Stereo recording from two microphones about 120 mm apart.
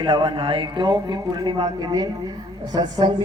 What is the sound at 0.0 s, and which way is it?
A man's voice, 45° right (ahead or behind).